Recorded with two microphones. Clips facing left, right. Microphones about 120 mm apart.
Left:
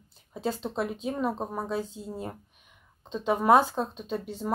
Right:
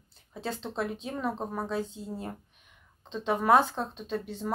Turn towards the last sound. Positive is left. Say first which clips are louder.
# left 1 dB
turn(degrees=10)  # may be behind; listen again after turning